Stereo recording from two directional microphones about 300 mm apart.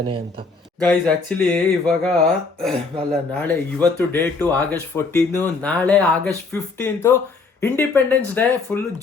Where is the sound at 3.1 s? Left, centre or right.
Centre.